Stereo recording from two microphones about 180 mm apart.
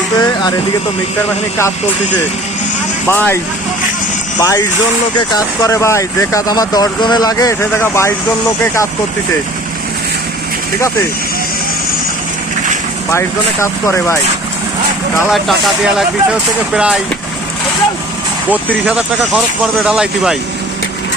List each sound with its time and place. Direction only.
0.2 s speech: 25° left (ahead or behind)
3.1 s speech: 10° left (ahead or behind)
13.1 s speech: 15° left (ahead or behind)
15.3 s speech: centre (ahead or behind)
18.5 s speech: 5° right (ahead or behind)